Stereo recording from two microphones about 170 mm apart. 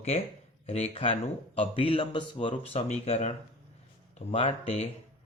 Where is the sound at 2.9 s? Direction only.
40° left (ahead or behind).